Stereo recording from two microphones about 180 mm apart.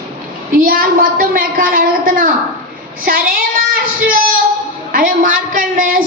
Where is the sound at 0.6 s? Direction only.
50° right (ahead or behind).